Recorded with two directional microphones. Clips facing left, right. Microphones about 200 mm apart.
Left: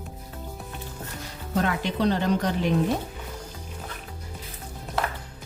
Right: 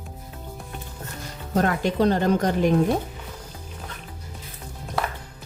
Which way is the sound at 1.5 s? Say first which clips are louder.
Right 4 dB; 45° right (ahead or behind).